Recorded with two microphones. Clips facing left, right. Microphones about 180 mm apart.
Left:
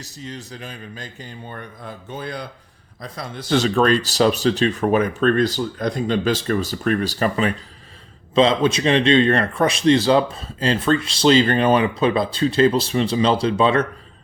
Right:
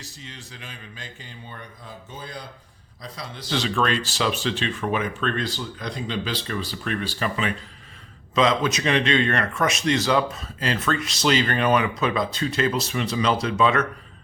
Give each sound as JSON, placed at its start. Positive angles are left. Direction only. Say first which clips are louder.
{"t": 0.0, "sound": "speech", "louder": "left 8 dB", "side_deg": 40}
{"t": 3.0, "sound": "speech", "louder": "left 5 dB", "side_deg": 50}
{"t": 8.4, "sound": "speech", "louder": "left 5 dB", "side_deg": 30}